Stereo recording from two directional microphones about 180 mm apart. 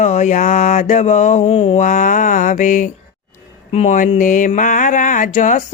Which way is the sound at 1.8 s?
45° left (ahead or behind).